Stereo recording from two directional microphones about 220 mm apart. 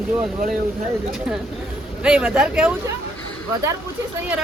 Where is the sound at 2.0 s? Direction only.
5° right (ahead or behind).